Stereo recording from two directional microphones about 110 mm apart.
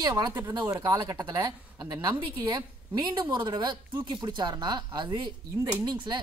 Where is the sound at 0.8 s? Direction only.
35° right (ahead or behind).